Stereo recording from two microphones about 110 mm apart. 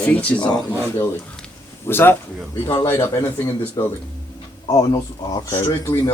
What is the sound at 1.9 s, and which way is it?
A man's voice, 20° left (ahead or behind).